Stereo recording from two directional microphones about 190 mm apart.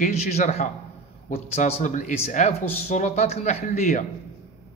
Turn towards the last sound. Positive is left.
turn(degrees=40)  # may be behind; listen again after turning